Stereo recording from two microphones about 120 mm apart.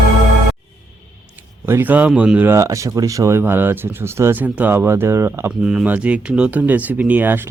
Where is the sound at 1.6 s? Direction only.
15° right (ahead or behind).